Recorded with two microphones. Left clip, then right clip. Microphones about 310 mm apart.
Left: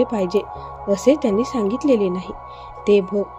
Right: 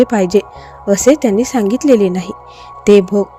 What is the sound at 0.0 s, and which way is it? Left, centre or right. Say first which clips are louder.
Speech: right 8 dB; right.